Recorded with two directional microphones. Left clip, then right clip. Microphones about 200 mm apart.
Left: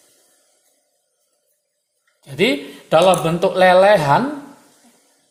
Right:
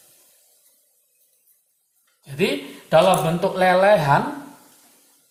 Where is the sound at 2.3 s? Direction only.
45° left (ahead or behind).